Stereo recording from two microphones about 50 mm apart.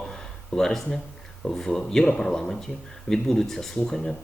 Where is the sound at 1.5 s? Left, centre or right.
Centre.